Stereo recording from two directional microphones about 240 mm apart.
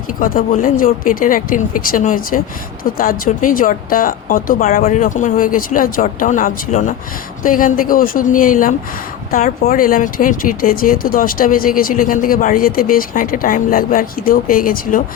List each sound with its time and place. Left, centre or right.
0.2 s speech: left